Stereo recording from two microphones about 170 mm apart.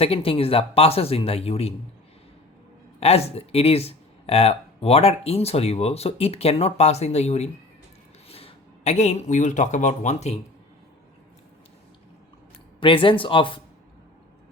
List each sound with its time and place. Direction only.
0.0 s speech: 35° left (ahead or behind)
3.0 s speech: 35° left (ahead or behind)
12.8 s speech: 30° left (ahead or behind)